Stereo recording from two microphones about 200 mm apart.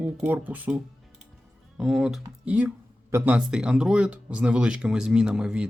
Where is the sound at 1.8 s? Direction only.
5° right (ahead or behind).